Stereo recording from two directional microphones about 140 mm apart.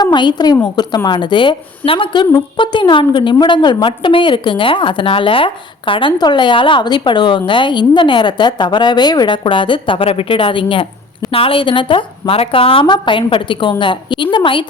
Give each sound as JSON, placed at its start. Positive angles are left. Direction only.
{"t": 0.0, "sound": "a woman's voice", "side_deg": 30}